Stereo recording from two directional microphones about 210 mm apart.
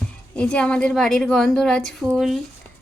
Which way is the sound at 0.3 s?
5° left (ahead or behind).